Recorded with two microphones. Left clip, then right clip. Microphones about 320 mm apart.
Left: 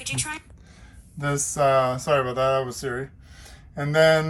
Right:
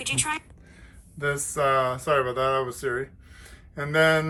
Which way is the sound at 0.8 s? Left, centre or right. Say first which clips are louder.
Right 2 dB; centre.